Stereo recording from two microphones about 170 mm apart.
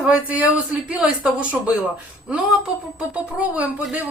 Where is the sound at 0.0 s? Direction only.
5° right (ahead or behind).